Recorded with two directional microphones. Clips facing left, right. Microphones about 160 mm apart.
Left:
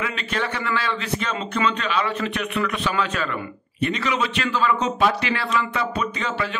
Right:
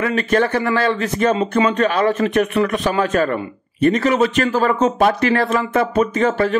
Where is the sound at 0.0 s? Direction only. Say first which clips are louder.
Right 10 dB; 45° right (ahead or behind).